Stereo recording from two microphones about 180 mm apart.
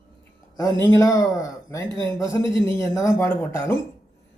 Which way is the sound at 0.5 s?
15° left (ahead or behind).